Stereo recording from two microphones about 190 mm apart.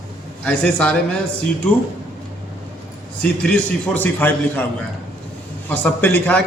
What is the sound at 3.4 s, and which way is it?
A man's voice, 5° left (ahead or behind).